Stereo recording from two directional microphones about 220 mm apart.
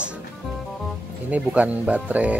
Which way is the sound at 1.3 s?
5° right (ahead or behind).